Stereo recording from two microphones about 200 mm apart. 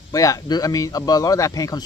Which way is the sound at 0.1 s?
15° left (ahead or behind).